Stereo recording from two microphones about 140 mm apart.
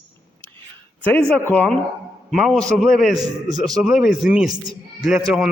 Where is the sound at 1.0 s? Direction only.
10° left (ahead or behind).